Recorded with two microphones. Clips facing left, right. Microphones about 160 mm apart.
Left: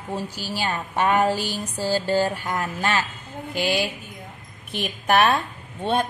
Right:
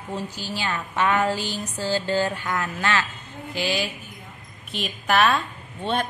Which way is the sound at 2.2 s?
30° left (ahead or behind).